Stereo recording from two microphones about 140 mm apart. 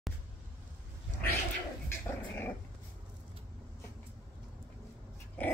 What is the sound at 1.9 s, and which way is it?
Dog, 15° left (ahead or behind).